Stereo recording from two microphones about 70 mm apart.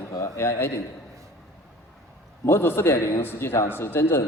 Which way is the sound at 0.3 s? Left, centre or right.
Left.